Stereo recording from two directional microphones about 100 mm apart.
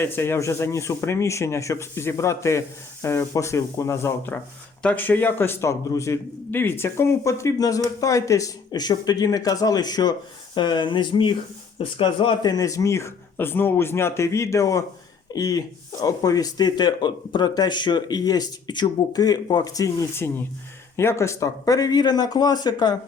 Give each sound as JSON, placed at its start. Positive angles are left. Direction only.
{"t": 0.0, "sound": "speech", "side_deg": 25}
{"t": 4.8, "sound": "speech", "side_deg": 15}